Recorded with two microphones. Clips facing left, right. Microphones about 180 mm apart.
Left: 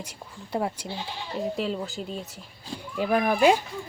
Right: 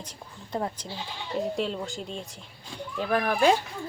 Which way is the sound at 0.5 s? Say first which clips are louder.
Left 3 dB; 10° left (ahead or behind).